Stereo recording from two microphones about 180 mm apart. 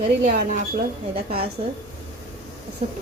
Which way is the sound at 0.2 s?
50° right (ahead or behind).